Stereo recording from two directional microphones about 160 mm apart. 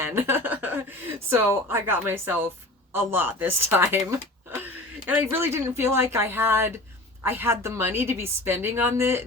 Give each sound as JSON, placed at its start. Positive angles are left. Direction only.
{"t": 0.0, "sound": "a woman's voice", "side_deg": -15}
{"t": 4.0, "sound": "a sound", "side_deg": -15}
{"t": 5.0, "sound": "a woman's voice", "side_deg": -10}